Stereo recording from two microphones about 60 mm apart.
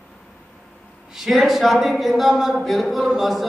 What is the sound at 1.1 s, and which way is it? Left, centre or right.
A woman's voice, centre.